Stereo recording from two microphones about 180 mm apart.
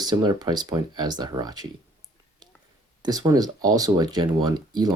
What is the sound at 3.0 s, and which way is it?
Speech, 20° right (ahead or behind).